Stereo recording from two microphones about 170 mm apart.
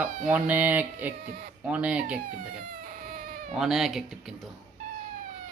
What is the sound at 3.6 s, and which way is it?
Speech, centre (ahead or behind).